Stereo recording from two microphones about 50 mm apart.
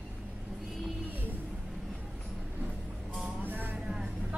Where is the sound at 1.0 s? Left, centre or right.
Right.